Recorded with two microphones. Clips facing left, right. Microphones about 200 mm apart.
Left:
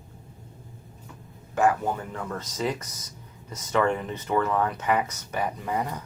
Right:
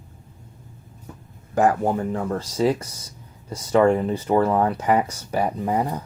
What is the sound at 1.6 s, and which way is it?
Speech, 35° right (ahead or behind).